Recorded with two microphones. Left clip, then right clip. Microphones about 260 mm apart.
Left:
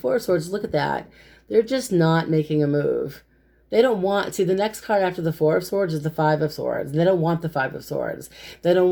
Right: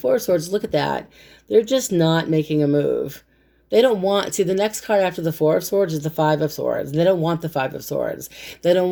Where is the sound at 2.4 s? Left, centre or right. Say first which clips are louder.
Right 1 dB; centre.